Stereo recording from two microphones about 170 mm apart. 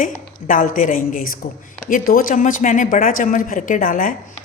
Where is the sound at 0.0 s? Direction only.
50° left (ahead or behind).